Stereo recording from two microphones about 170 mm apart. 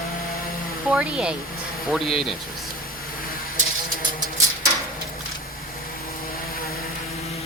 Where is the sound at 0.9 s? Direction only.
5° right (ahead or behind).